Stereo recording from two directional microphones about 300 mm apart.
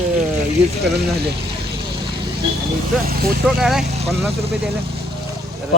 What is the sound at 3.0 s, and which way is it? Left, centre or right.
Speech, right.